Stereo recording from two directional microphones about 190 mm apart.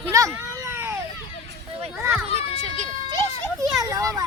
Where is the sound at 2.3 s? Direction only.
35° right (ahead or behind).